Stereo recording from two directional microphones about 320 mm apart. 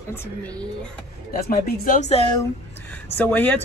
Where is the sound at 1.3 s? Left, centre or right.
Left.